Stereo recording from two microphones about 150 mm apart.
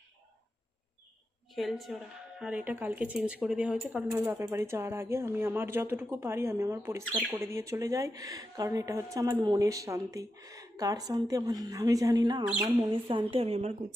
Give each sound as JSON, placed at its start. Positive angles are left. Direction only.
{"t": 1.5, "sound": "a woman's voice", "side_deg": 0}
{"t": 4.1, "sound": "a woman's voice", "side_deg": -15}